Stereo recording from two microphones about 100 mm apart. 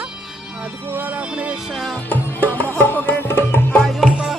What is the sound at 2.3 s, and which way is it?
Music, 20° left (ahead or behind).